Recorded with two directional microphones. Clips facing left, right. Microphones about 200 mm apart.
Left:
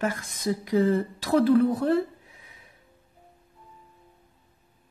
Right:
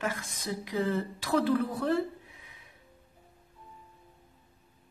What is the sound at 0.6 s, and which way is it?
Speech, 45° left (ahead or behind).